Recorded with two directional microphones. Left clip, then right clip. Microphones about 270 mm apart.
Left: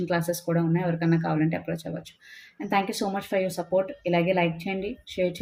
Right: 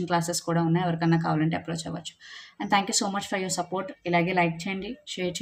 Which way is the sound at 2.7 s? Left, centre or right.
Centre.